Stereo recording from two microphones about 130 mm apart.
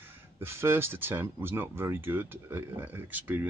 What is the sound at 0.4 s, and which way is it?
Speech, 20° right (ahead or behind).